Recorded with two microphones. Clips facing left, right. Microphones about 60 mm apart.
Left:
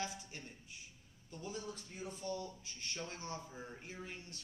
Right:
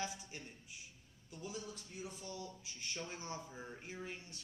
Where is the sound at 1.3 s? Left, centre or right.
Centre.